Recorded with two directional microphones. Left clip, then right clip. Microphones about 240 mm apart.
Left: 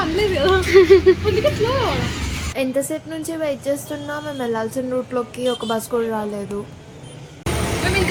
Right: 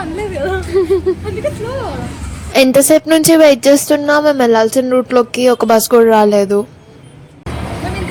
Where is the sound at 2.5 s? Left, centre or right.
Right.